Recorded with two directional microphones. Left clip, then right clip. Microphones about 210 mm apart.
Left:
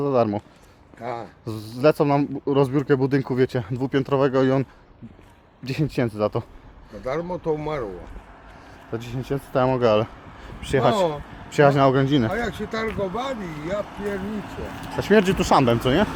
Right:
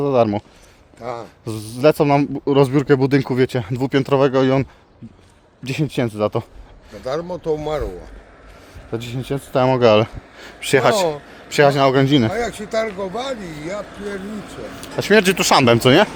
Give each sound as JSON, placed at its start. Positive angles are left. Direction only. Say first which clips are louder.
{"t": 0.0, "sound": "speech", "louder": "right 4 dB", "side_deg": -30}
{"t": 1.0, "sound": "speech", "louder": "right 2 dB", "side_deg": -15}
{"t": 1.5, "sound": "speech", "louder": "right 4 dB", "side_deg": -30}
{"t": 7.0, "sound": "speech", "louder": "right 3 dB", "side_deg": -10}
{"t": 8.9, "sound": "speech", "louder": "right 3 dB", "side_deg": -35}
{"t": 12.3, "sound": "speech", "louder": "right 5 dB", "side_deg": -15}
{"t": 14.3, "sound": "speech", "louder": "even", "side_deg": 30}
{"t": 14.9, "sound": "speech", "louder": "right 4 dB", "side_deg": -40}